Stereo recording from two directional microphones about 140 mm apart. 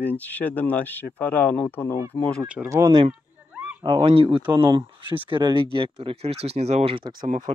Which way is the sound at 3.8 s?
40° right (ahead or behind).